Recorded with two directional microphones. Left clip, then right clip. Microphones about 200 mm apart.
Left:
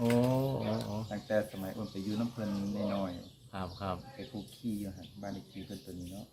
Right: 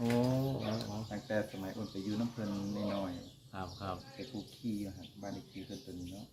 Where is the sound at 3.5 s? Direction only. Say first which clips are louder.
Left 3 dB; 40° left (ahead or behind).